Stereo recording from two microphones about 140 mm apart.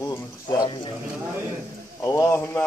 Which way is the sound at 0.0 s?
25° left (ahead or behind).